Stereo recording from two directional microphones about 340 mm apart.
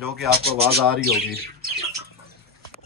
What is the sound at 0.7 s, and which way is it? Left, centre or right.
Speech, right.